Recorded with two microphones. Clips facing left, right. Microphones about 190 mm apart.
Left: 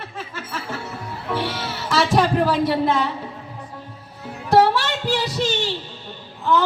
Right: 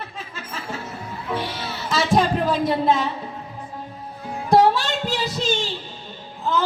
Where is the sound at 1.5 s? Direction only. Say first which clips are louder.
Left 2 dB; 75° left (ahead or behind).